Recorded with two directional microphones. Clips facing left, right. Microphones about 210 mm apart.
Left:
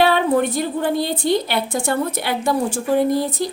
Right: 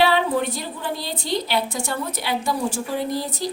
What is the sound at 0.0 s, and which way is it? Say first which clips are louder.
A woman's voice: left 3 dB; 50° left (ahead or behind).